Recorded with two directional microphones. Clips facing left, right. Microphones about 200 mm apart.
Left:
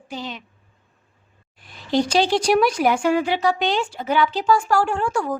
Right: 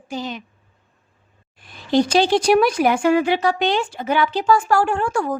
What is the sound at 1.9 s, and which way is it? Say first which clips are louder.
A woman's voice: right 3 dB; 55° right (ahead or behind).